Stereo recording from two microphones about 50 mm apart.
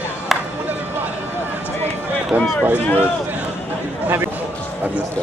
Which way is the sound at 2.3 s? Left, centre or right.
Right.